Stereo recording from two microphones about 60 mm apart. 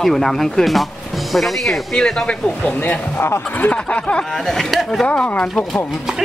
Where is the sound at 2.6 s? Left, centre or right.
Left.